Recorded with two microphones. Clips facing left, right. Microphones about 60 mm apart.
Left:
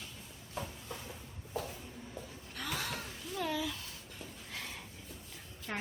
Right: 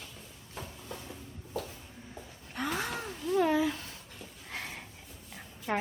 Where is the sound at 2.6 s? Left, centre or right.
Right.